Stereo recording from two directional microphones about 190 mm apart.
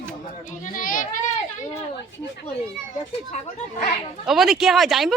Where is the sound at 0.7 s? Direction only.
45° left (ahead or behind).